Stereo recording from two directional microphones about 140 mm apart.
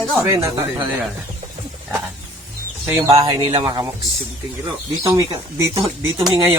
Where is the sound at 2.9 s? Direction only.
25° right (ahead or behind).